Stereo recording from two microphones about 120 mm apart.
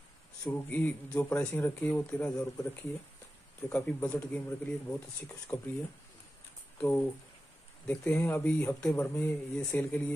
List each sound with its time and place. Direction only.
0.5 s speech: 15° left (ahead or behind)
2.3 s speech: 25° left (ahead or behind)
3.7 s speech: 10° left (ahead or behind)
6.8 s speech: 15° left (ahead or behind)